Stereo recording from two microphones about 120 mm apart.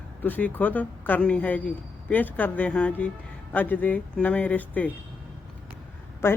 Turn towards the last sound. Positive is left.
turn(degrees=20)  # may be behind; listen again after turning